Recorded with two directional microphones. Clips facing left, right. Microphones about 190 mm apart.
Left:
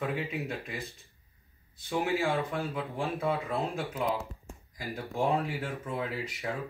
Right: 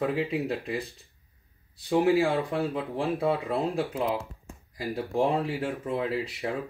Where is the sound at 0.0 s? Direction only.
35° right (ahead or behind).